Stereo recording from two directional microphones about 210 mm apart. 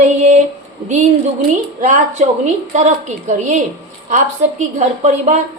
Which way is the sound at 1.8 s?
35° right (ahead or behind).